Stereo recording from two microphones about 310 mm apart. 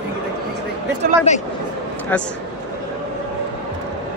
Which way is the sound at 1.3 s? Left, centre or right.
Left.